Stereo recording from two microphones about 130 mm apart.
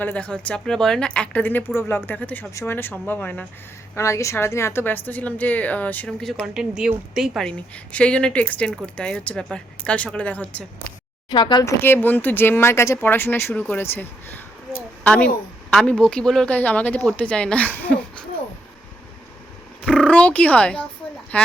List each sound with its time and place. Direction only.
0.0 s a woman's voice: 10° left (ahead or behind)
7.9 s a woman's voice: 10° left (ahead or behind)
11.3 s speech: 35° left (ahead or behind)
11.6 s a woman's voice: 15° left (ahead or behind)
19.8 s a woman's voice: 10° left (ahead or behind)